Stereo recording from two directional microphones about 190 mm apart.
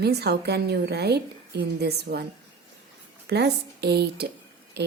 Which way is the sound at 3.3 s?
60° right (ahead or behind).